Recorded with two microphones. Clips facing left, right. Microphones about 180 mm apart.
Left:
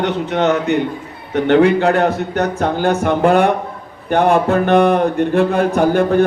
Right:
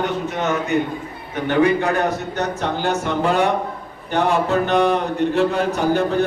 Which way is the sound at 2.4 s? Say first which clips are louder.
Left 5 dB; 55° left (ahead or behind).